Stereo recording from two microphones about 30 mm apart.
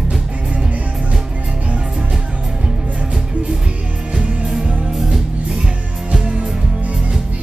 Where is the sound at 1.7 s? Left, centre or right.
Right.